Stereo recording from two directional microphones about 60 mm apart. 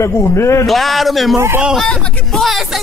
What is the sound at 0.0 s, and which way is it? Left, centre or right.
Speech, left.